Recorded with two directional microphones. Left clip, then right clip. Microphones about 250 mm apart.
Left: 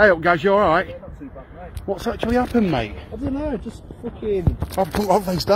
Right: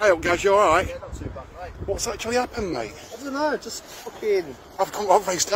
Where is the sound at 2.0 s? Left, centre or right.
Centre.